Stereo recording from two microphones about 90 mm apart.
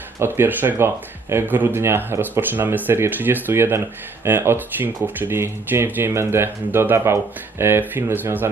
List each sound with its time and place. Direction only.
0.2 s speech: 25° right (ahead or behind)